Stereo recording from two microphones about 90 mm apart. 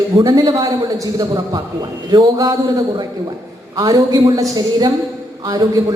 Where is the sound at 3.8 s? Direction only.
50° right (ahead or behind).